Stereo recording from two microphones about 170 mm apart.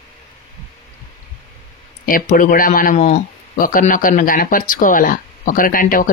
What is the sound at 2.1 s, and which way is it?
Speech, 50° left (ahead or behind).